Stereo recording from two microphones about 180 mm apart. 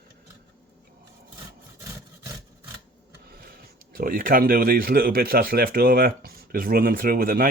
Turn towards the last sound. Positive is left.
turn(degrees=-50)  # may be behind; listen again after turning